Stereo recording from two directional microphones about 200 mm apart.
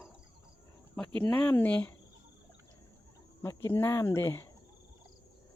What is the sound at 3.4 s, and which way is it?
Speech, 10° left (ahead or behind).